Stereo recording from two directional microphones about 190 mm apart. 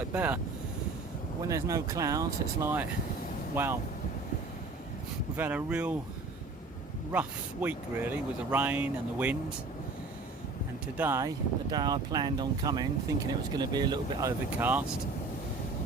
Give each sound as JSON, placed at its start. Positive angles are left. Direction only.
{"t": 0.1, "sound": "speech", "side_deg": -10}
{"t": 1.5, "sound": "speech", "side_deg": -15}
{"t": 5.4, "sound": "speech", "side_deg": -5}
{"t": 7.1, "sound": "speech", "side_deg": -10}
{"t": 10.9, "sound": "speech", "side_deg": -10}